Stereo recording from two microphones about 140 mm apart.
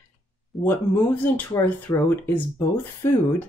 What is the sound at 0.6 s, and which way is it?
Speech, 15° left (ahead or behind).